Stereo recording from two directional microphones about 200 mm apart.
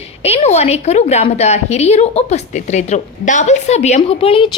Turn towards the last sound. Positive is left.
turn(degrees=25)  # may be behind; listen again after turning